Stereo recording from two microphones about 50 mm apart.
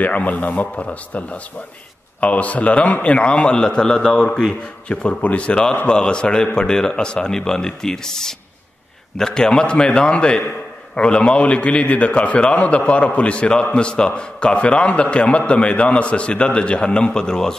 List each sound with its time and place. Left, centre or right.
0.0 s a man's voice: left; by 4.6 s centre
4.8 s a man's voice: left